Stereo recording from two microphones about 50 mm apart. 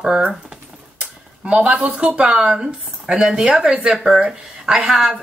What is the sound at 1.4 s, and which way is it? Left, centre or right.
Speech, right.